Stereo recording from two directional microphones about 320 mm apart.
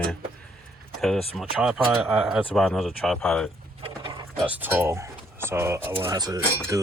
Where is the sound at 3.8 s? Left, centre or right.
Centre.